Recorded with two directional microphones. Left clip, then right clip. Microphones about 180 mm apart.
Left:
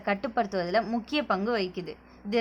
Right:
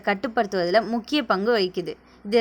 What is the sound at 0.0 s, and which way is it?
A woman's voice, 25° right (ahead or behind).